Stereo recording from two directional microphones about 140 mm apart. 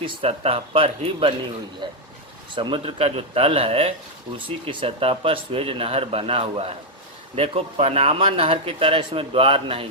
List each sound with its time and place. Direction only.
0.0 s speech: 45° right (ahead or behind)